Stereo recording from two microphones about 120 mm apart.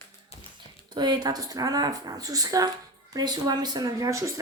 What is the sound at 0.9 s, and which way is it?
Speech, 35° right (ahead or behind).